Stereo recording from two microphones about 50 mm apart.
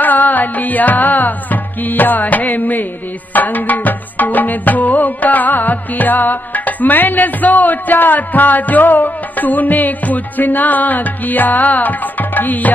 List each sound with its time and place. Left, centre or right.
0.0 s music: left